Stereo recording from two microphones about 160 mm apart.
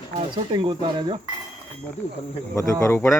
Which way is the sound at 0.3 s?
30° right (ahead or behind).